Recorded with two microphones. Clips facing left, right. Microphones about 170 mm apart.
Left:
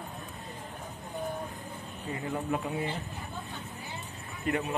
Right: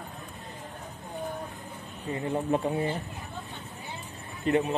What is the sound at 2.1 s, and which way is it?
Speech, 30° right (ahead or behind).